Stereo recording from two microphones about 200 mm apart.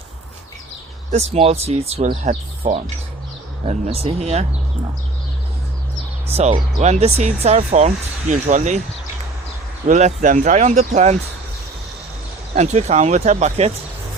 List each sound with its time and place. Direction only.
1.1 s speech: 30° right (ahead or behind)
3.7 s speech: 30° right (ahead or behind)
6.2 s speech: 30° right (ahead or behind)
9.8 s speech: 35° right (ahead or behind)
12.5 s speech: 35° right (ahead or behind)